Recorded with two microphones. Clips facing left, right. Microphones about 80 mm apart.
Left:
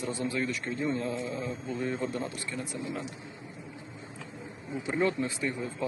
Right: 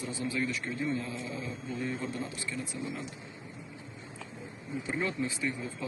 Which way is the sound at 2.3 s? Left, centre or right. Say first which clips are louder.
Left 1 dB; left.